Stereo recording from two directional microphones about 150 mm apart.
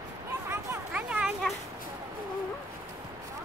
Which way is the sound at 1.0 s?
5° right (ahead or behind).